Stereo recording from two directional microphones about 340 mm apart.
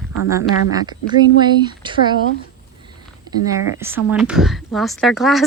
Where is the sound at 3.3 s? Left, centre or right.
Centre.